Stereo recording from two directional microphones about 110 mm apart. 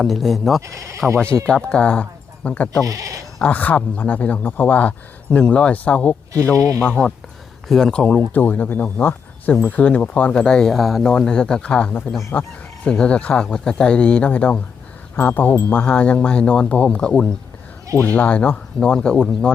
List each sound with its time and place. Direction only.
0.0 s speech: centre (ahead or behind)
0.6 s speech: 30° right (ahead or behind)
1.5 s speech: 10° left (ahead or behind)
2.8 s sheep: 30° right (ahead or behind)
3.3 s speech: 15° left (ahead or behind)
6.6 s speech: 30° right (ahead or behind)
7.7 s speech: 5° left (ahead or behind)